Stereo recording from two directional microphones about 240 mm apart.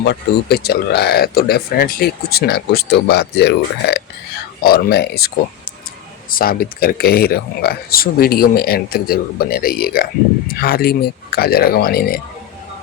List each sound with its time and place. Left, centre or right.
0.0 s speech: left
6.3 s speech: left